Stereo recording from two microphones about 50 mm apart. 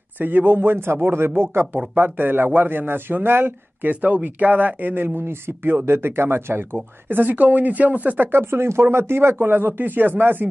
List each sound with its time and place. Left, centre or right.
0.2 s speech: right